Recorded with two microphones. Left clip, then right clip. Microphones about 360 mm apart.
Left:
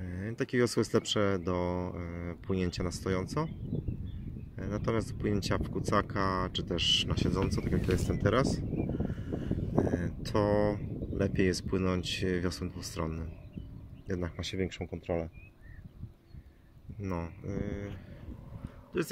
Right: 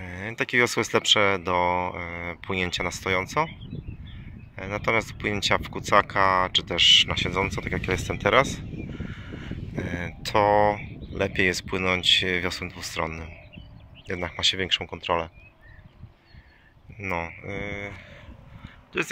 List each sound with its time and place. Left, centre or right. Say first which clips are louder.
0.0 s a sound: right 8 dB; right
0.4 s speech: right 7 dB; centre
2.0 s speech: right 9 dB; right
2.5 s speech: right 8 dB; centre
4.6 s speech: right 9 dB; centre
8.7 s crow: left 3 dB; left
9.9 s speech: right 8 dB; centre
14.8 s speech: right 9 dB; right
17.1 s speech: right 9 dB; centre